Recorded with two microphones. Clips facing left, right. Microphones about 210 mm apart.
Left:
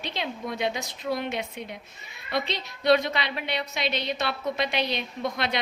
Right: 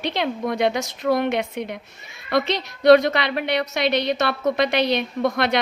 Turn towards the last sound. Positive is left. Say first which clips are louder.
# right 8 dB
turn(degrees=-70)  # may be behind; listen again after turning